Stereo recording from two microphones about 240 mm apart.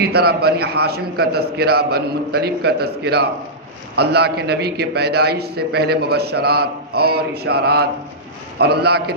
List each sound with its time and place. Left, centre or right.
0.1 s a man's voice: right